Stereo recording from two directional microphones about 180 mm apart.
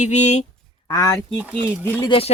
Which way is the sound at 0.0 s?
40° left (ahead or behind).